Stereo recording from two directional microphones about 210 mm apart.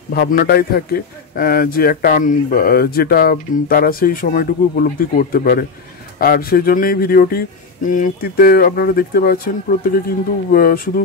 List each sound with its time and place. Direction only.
0.1 s a man's voice: 45° left (ahead or behind)